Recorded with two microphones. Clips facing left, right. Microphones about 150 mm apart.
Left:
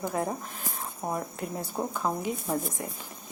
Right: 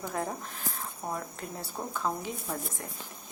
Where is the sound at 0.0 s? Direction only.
10° left (ahead or behind).